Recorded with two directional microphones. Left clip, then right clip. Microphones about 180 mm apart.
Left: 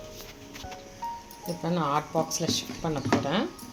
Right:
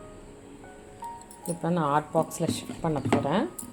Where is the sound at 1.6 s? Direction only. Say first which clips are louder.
Right 2 dB; 20° right (ahead or behind).